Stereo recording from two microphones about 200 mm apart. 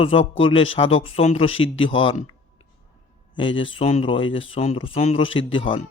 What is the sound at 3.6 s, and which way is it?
A man's voice, 25° left (ahead or behind).